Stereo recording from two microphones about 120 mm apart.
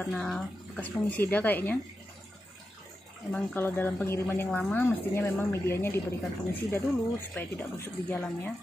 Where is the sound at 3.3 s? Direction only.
15° left (ahead or behind).